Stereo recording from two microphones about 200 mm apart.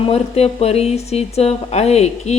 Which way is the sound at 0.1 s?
30° left (ahead or behind).